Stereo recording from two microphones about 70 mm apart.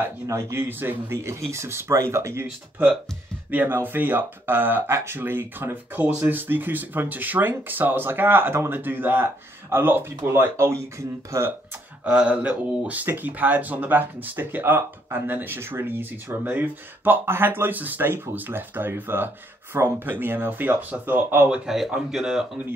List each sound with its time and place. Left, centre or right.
0.3 s a man's voice: right
3.4 s a man's voice: right
12.0 s a man's voice: centre; by 21.5 s right
21.5 s a man's voice: centre